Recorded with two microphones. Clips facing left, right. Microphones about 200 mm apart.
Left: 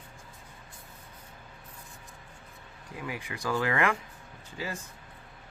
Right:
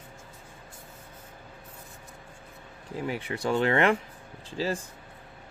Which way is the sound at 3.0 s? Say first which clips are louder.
Right 6 dB; 30° right (ahead or behind).